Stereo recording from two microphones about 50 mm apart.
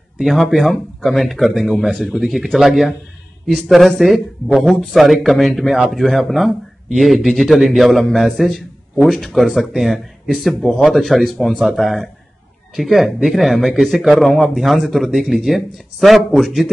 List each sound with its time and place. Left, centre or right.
0.2 s a man's voice: centre